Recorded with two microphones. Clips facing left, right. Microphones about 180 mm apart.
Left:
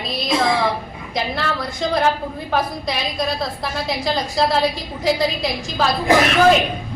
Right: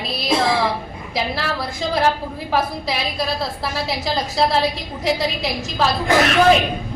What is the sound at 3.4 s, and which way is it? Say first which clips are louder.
A woman's voice: even; centre (ahead or behind).